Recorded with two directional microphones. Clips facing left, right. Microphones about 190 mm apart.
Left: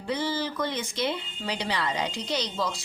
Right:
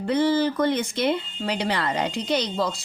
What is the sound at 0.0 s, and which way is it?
A woman's voice, 60° right (ahead or behind).